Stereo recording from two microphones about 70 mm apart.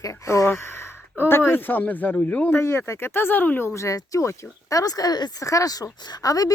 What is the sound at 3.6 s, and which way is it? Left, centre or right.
Speech, left.